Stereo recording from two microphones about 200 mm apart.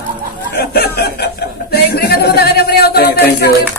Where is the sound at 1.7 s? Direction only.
50° left (ahead or behind).